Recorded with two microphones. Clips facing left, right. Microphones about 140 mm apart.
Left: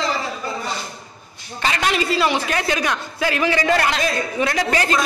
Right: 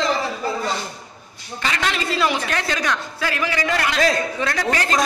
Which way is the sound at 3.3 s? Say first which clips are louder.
Left 4 dB; 25° left (ahead or behind).